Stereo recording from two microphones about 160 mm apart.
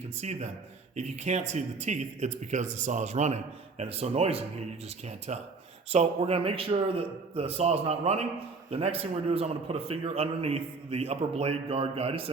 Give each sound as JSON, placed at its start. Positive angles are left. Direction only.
{"t": 0.2, "sound": "a man's voice", "side_deg": -45}